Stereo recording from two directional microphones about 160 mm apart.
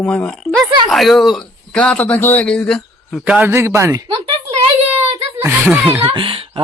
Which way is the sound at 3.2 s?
10° right (ahead or behind).